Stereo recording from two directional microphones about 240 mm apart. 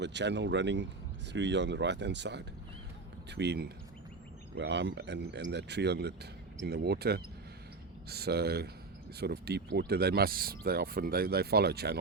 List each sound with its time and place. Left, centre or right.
0.0 s speech: right